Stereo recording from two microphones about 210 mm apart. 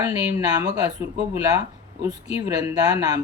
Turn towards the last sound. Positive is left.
turn(degrees=-20)  # may be behind; listen again after turning